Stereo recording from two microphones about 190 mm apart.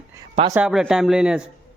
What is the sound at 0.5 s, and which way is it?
Speech, 5° right (ahead or behind).